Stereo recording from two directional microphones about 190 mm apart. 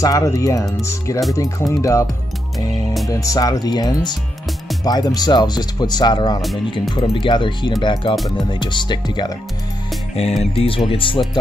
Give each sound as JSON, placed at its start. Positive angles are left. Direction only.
{"t": 0.0, "sound": "speech", "side_deg": 15}
{"t": 2.7, "sound": "music", "side_deg": 0}
{"t": 3.1, "sound": "speech", "side_deg": 20}
{"t": 10.4, "sound": "speech", "side_deg": 30}